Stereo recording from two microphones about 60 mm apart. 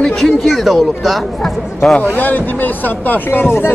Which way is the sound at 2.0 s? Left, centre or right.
Left.